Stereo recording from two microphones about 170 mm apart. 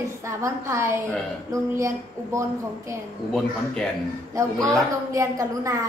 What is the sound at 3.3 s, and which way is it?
Speech, centre (ahead or behind).